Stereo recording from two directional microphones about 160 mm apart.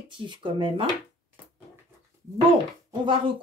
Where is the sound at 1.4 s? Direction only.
10° right (ahead or behind).